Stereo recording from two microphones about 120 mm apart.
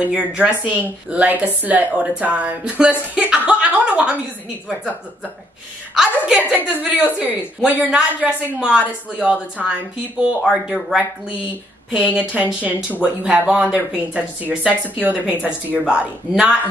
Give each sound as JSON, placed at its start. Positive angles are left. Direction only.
{"t": 0.1, "sound": "a woman's voice", "side_deg": -10}
{"t": 5.9, "sound": "a woman's voice", "side_deg": -5}